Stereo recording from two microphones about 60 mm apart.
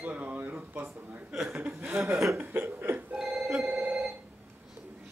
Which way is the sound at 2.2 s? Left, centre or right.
Right.